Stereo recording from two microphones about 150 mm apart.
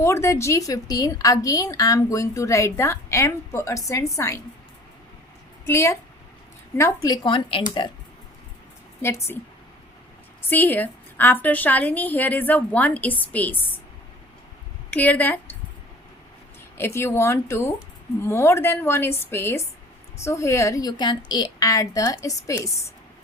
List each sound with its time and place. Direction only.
0.0 s a woman's voice: 20° left (ahead or behind)
5.6 s a woman's voice: 20° left (ahead or behind)
9.0 s a woman's voice: 15° left (ahead or behind)
10.5 s a woman's voice: 15° left (ahead or behind)
14.8 s a woman's voice: 10° left (ahead or behind)
16.7 s a woman's voice: 15° left (ahead or behind)